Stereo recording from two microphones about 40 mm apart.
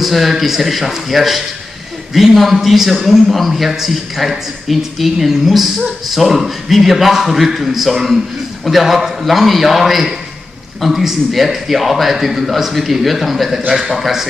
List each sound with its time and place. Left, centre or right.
0.0 s a man's voice: centre